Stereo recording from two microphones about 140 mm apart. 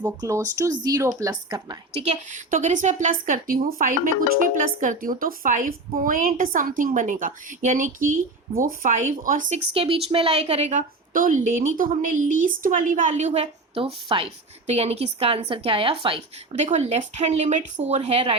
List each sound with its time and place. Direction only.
0.2 s speech: 25° right (ahead or behind)
1.9 s a woman's voice: 45° right (ahead or behind)
2.3 s a woman's voice: 60° right (ahead or behind)
9.7 s a woman's voice: 40° right (ahead or behind)
16.6 s speech: 55° right (ahead or behind)